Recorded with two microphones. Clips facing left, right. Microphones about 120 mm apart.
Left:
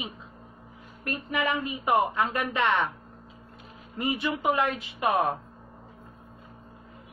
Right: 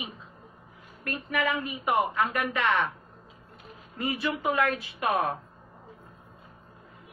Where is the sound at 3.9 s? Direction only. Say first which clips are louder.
Left 1 dB; 25° left (ahead or behind).